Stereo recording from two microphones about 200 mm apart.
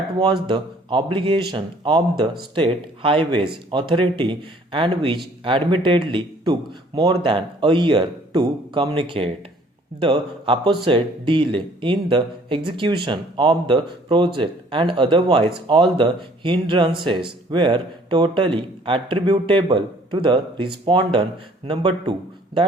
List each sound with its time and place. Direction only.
0.2 s speech: 25° right (ahead or behind)